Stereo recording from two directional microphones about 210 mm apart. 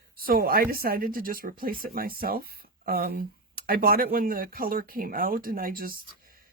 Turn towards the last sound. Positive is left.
turn(degrees=-45)  # may be behind; listen again after turning